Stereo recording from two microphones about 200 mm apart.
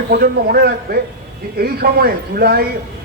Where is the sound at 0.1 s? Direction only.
50° right (ahead or behind).